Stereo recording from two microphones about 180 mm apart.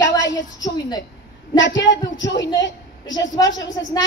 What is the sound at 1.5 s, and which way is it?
Speech, 90° left.